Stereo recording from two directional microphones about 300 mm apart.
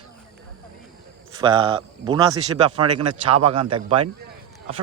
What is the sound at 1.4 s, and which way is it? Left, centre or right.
A man's voice, centre.